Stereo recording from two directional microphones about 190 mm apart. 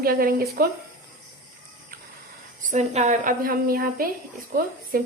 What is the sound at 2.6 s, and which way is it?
A woman's voice, 40° right (ahead or behind).